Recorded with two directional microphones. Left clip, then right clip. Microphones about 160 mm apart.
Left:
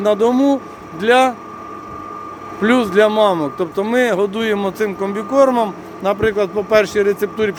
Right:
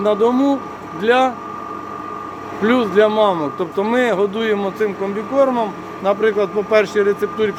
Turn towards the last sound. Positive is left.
turn(degrees=30)  # may be behind; listen again after turning